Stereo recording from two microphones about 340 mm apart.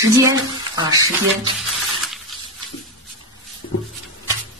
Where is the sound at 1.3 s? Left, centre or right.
Centre.